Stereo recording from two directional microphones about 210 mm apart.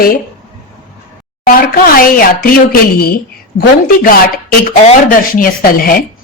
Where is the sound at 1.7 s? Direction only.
45° left (ahead or behind).